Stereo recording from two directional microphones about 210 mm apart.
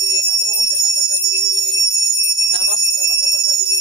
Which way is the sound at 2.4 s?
20° right (ahead or behind).